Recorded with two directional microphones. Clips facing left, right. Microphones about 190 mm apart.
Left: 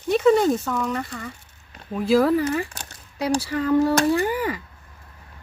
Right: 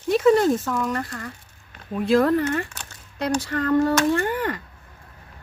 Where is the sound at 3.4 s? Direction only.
10° left (ahead or behind).